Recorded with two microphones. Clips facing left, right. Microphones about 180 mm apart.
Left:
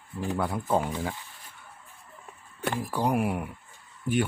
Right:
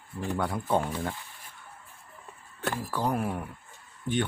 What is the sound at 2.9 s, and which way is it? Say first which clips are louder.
Speech: left 3 dB; 15° left (ahead or behind).